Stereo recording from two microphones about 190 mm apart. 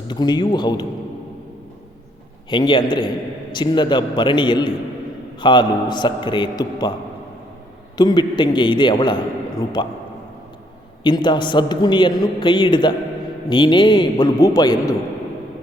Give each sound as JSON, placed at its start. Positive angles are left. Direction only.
{"t": 0.1, "sound": "a man's voice", "side_deg": 20}
{"t": 2.5, "sound": "a man's voice", "side_deg": 25}
{"t": 7.9, "sound": "a man's voice", "side_deg": 20}
{"t": 11.0, "sound": "a man's voice", "side_deg": 25}